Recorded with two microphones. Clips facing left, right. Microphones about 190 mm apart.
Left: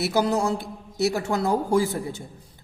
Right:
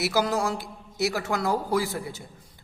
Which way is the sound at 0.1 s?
25° left (ahead or behind).